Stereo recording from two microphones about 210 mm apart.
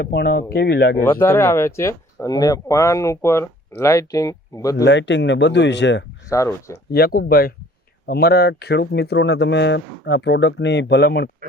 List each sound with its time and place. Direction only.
0.0 s speech: 50° left (ahead or behind)
1.0 s speech: 10° left (ahead or behind)
4.8 s speech: 60° left (ahead or behind)
6.2 s speech: 15° left (ahead or behind)
6.9 s speech: 45° left (ahead or behind)